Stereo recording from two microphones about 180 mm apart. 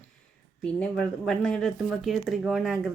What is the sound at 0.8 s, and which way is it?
Speech, 5° left (ahead or behind).